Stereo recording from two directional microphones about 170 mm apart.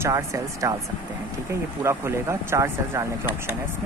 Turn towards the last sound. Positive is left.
turn(degrees=-15)  # may be behind; listen again after turning